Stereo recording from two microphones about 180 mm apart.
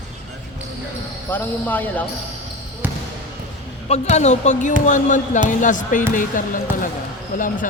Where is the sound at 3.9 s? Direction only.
40° left (ahead or behind).